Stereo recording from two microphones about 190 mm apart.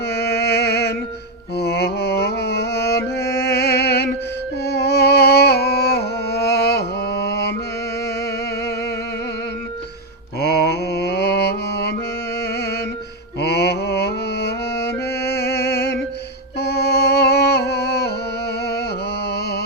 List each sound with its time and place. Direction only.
0.1 s music: 60° left (ahead or behind)
1.5 s mantra: 55° left (ahead or behind)
3.4 s music: 60° left (ahead or behind)
10.4 s music: 55° left (ahead or behind)
19.3 s a sound: 60° left (ahead or behind)